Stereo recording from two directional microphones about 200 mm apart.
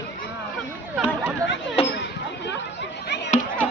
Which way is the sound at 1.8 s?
30° left (ahead or behind).